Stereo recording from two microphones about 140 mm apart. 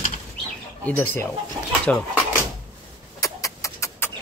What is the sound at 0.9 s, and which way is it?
Speech, 15° left (ahead or behind).